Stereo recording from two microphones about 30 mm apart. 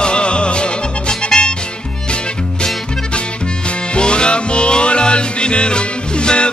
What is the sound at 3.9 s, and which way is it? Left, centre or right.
Music, left.